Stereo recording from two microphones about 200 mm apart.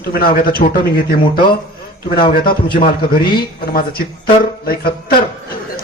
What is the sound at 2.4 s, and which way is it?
Speech, 45° left (ahead or behind).